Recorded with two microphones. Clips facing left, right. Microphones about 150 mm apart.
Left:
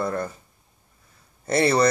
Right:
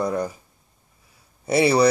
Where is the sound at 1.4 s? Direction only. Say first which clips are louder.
Right 2 dB; 10° right (ahead or behind).